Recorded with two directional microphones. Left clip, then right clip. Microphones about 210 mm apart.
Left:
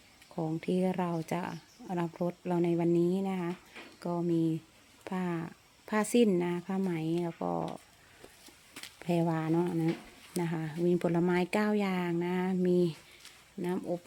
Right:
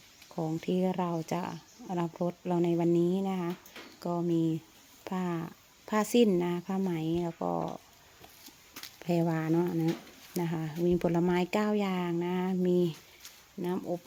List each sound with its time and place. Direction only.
0.3 s speech: centre (ahead or behind)